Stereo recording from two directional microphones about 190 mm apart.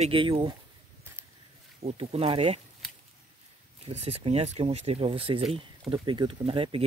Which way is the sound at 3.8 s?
35° right (ahead or behind).